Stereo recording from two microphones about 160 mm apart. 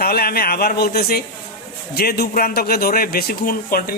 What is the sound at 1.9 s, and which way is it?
A man's voice, 85° left.